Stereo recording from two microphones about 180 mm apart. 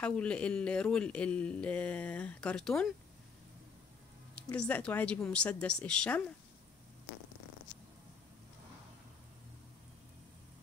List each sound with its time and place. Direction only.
0.0 s speech: 5° left (ahead or behind)
4.4 s speech: 5° left (ahead or behind)